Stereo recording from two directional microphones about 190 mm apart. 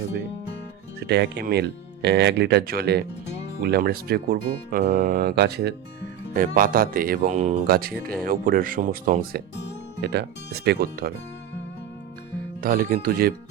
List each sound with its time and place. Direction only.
0.9 s speech: 60° right (ahead or behind)
12.6 s speech: 50° right (ahead or behind)